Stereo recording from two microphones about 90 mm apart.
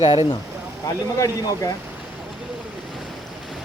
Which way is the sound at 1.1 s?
40° left (ahead or behind).